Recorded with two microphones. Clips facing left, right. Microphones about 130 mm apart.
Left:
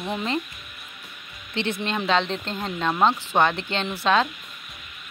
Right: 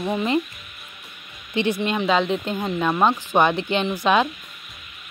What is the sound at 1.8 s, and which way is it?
Speech, 10° right (ahead or behind).